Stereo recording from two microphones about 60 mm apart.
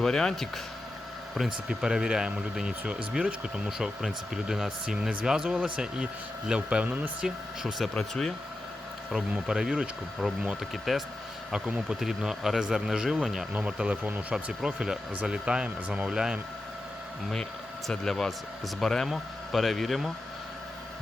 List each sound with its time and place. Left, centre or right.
0.0 s speech: centre
1.4 s speech: centre
7.2 s speech: centre
7.9 s speech: centre
9.5 s speech: centre
10.9 s speech: centre
11.5 s speech: centre
13.5 s speech: centre
14.0 s speech: right
14.3 s speech: centre
17.8 s speech: centre